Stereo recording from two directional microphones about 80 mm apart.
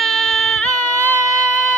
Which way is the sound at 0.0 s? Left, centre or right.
Centre.